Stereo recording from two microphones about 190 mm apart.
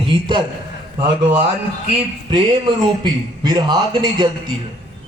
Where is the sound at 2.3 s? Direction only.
25° right (ahead or behind).